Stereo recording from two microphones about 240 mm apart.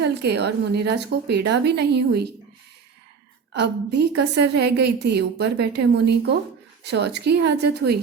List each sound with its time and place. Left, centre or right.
0.0 s a woman's voice: right
3.5 s a woman's voice: right